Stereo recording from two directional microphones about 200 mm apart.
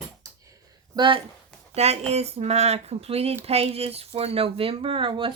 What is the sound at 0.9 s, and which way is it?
Speech, 25° right (ahead or behind).